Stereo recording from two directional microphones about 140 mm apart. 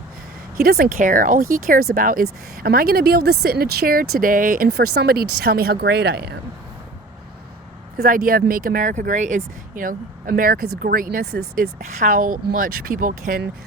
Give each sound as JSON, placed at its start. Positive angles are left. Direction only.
{"t": 0.5, "sound": "speech", "side_deg": -90}
{"t": 7.9, "sound": "speech", "side_deg": -90}